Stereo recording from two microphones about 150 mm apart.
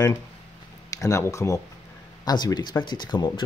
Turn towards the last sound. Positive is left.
turn(degrees=30)  # may be behind; listen again after turning